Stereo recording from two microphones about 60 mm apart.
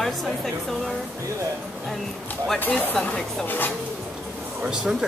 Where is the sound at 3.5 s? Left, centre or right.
Left.